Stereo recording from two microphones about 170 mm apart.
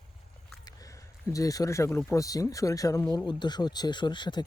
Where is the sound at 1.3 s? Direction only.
20° left (ahead or behind).